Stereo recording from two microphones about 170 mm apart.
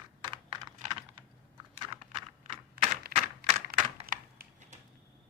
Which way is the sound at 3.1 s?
60° right (ahead or behind).